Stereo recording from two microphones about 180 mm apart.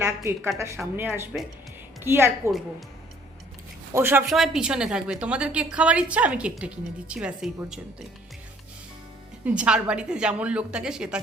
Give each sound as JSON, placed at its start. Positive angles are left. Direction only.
{"t": 0.0, "sound": "a woman's voice", "side_deg": -15}
{"t": 3.9, "sound": "a woman's voice", "side_deg": -10}
{"t": 9.4, "sound": "a woman's voice", "side_deg": -5}